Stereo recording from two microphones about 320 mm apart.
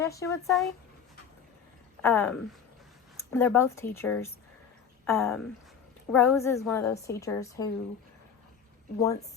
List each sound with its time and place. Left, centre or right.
0.0 s a woman's voice: centre
2.0 s speech: centre
3.3 s a woman's voice: centre